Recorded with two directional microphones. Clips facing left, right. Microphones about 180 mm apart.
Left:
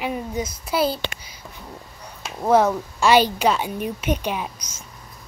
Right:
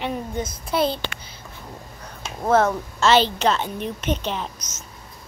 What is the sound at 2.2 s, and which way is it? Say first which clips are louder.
A woman's voice: left 1 dB; 10° left (ahead or behind).